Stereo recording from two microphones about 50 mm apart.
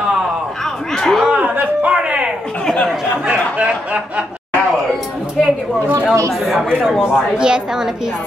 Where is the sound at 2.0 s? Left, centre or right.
Right.